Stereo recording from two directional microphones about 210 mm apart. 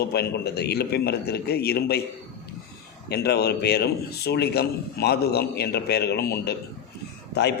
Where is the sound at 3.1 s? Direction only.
50° left (ahead or behind).